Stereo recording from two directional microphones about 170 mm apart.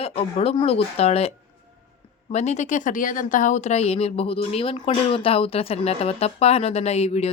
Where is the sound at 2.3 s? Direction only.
40° left (ahead or behind).